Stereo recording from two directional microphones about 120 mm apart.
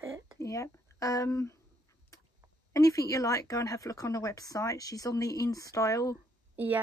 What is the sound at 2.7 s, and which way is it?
Speech, 30° left (ahead or behind).